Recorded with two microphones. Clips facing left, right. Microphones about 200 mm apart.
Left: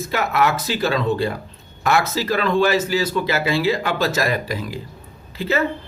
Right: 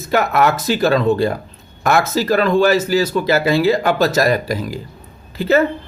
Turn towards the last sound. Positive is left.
turn(degrees=-45)  # may be behind; listen again after turning